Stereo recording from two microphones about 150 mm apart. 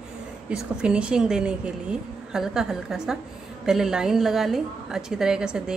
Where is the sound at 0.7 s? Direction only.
5° right (ahead or behind).